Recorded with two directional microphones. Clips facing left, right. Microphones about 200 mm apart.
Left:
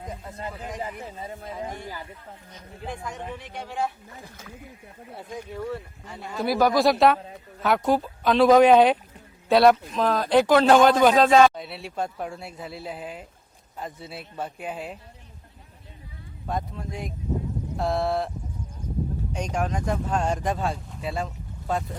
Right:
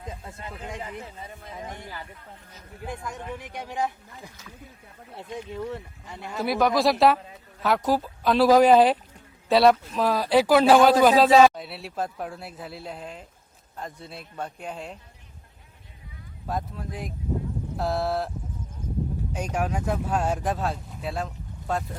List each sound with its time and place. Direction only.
0.3 s a man's voice: 25° left (ahead or behind)
3.3 s speech: 15° right (ahead or behind)
5.5 s speech: 20° right (ahead or behind)
6.3 s speech: centre (ahead or behind)
16.5 s speech: centre (ahead or behind)
18.8 s a sound: 5° right (ahead or behind)
19.3 s speech: 5° right (ahead or behind)